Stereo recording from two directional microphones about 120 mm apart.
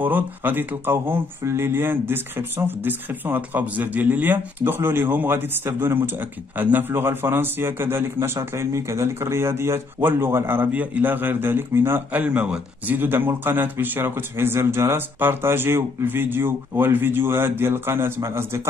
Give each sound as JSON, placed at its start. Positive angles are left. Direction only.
{"t": 0.0, "sound": "a man's voice", "side_deg": -15}